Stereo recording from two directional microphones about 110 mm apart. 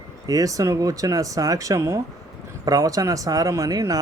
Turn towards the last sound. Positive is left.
turn(degrees=-30)  # may be behind; listen again after turning